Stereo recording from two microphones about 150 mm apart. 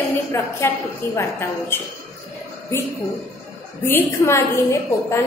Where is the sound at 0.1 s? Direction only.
15° left (ahead or behind).